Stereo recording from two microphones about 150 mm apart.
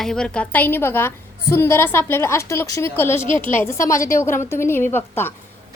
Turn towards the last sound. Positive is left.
turn(degrees=15)  # may be behind; listen again after turning